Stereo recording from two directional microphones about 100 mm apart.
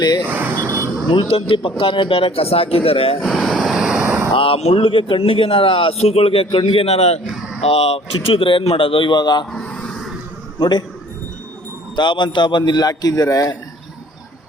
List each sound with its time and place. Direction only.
0.2 s a sound: 15° right (ahead or behind)
0.6 s a sound: 35° right (ahead or behind)
1.3 s a man's voice: 60° left (ahead or behind)
3.2 s vehicle: 5° left (ahead or behind)
4.0 s vehicle: 20° right (ahead or behind)
4.4 s a man's voice: 75° left (ahead or behind)
6.6 s a man's voice: 55° left (ahead or behind)
6.8 s a man's voice: 90° left; by 9.5 s 45° left (ahead or behind)
9.5 s a sound: 10° left (ahead or behind)
10.6 s a man's voice: 45° left (ahead or behind)
11.9 s a man's voice: 50° left (ahead or behind)